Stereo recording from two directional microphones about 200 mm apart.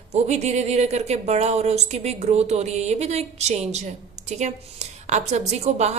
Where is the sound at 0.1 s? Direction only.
35° right (ahead or behind).